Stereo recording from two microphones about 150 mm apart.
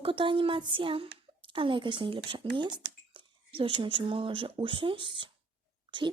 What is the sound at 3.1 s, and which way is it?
Whispering, 35° right (ahead or behind).